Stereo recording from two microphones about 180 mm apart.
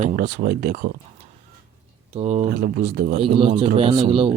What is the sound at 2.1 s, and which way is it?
Speech, 35° right (ahead or behind).